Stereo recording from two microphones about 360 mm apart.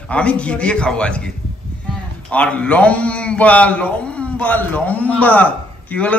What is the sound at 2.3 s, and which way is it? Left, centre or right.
A man's voice, centre.